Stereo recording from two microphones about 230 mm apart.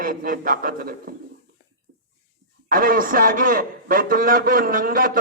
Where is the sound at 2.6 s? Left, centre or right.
Right.